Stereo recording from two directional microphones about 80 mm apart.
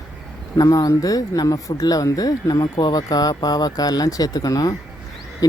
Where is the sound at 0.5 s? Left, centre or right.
Left.